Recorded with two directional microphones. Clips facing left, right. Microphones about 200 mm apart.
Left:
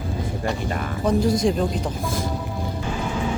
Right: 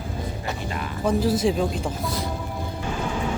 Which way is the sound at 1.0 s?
5° right (ahead or behind).